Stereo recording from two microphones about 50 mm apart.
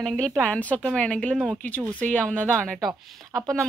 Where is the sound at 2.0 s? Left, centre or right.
Left.